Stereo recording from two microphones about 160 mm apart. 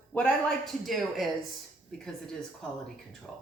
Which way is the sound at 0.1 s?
5° left (ahead or behind).